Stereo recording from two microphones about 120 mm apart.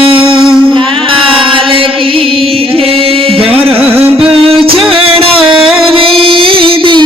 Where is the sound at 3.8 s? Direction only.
15° right (ahead or behind).